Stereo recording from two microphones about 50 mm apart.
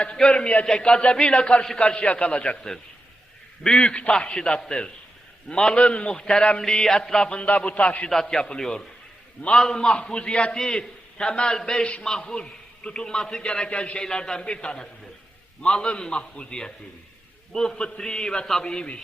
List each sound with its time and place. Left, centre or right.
0.0 s a man's voice: left
3.6 s a man's voice: centre
8.1 s a man's voice: centre